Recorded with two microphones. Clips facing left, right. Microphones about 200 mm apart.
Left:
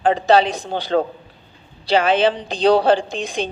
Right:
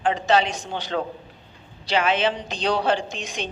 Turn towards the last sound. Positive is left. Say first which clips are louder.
# left 7 dB
turn(degrees=30)  # may be behind; listen again after turning